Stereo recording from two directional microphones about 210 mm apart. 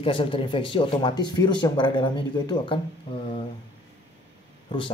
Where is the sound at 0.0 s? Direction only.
25° left (ahead or behind).